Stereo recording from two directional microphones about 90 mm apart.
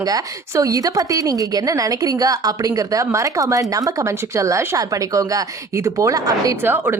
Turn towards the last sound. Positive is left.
turn(degrees=-25)  # may be behind; listen again after turning